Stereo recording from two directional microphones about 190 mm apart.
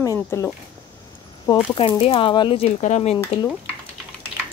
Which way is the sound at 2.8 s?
35° left (ahead or behind).